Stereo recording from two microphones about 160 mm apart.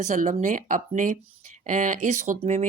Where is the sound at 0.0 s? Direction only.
50° right (ahead or behind).